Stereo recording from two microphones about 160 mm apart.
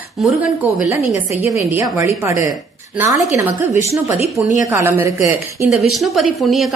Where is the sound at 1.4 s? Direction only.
15° right (ahead or behind).